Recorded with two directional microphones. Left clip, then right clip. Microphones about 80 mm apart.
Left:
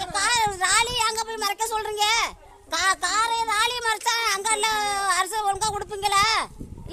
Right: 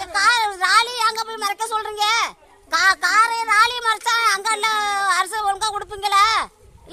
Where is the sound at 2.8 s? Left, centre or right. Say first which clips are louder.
Right 7 dB; left.